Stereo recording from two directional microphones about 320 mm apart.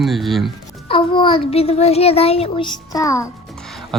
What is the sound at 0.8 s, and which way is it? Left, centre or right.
A child's voice, centre.